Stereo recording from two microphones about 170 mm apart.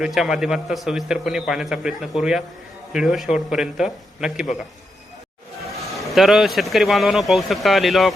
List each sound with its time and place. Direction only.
0.0 s a man's voice: 5° right (ahead or behind)
5.9 s a man's voice: centre (ahead or behind)